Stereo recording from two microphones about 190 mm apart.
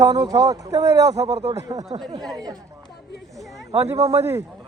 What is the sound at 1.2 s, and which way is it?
Speech, 35° right (ahead or behind).